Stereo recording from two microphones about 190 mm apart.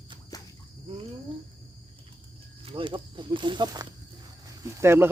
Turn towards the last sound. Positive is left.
turn(degrees=-15)  # may be behind; listen again after turning